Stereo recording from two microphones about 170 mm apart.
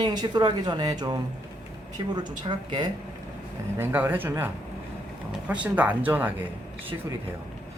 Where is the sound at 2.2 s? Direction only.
25° right (ahead or behind).